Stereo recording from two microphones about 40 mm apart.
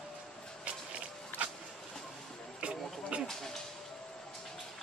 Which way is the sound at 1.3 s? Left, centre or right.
Left.